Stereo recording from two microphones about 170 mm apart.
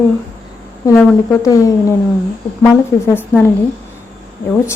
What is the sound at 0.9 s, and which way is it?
A woman's voice, 15° left (ahead or behind).